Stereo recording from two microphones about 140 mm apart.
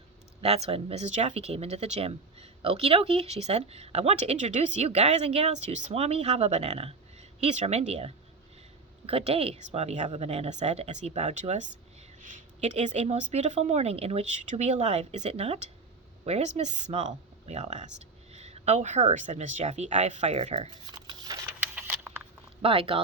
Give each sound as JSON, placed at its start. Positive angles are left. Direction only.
{"t": 0.4, "sound": "speech", "side_deg": -45}
{"t": 20.5, "sound": "speech", "side_deg": -35}
{"t": 21.6, "sound": "a sound", "side_deg": -10}
{"t": 22.6, "sound": "speech", "side_deg": -40}